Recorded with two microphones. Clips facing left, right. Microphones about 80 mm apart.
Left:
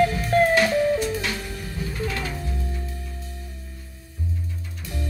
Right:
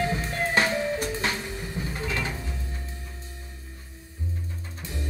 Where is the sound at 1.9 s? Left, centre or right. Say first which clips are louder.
Left 2 dB; right.